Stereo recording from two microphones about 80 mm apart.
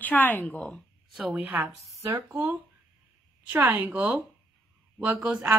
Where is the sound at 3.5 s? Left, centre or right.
Right; by 5.6 s centre.